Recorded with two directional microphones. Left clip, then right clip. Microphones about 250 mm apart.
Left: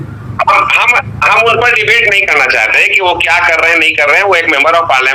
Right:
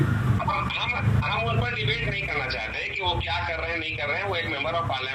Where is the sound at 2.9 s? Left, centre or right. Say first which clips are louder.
Left 18 dB; left.